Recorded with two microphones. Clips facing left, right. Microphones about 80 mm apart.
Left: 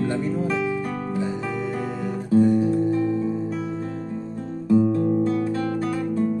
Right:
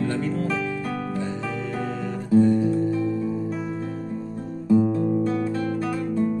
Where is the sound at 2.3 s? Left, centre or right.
Centre.